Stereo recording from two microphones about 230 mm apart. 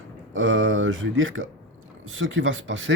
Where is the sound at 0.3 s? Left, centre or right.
Right.